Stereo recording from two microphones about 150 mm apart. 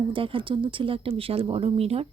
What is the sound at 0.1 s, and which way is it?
Speech, 35° right (ahead or behind).